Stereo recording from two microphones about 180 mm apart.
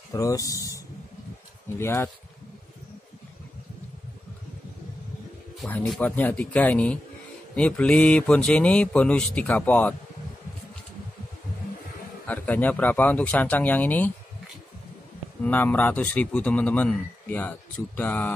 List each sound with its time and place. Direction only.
0.1 s speech: 20° left (ahead or behind)
1.8 s speech: 15° left (ahead or behind)
5.6 s speech: 10° left (ahead or behind)
12.3 s speech: 10° left (ahead or behind)
15.4 s speech: 10° left (ahead or behind)